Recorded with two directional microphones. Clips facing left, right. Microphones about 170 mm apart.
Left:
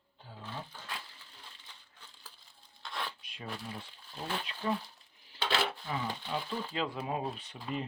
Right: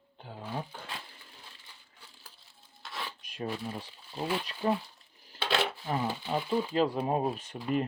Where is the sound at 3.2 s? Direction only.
45° right (ahead or behind).